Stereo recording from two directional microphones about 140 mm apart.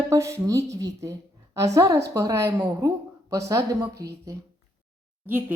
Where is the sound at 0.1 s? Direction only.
20° right (ahead or behind).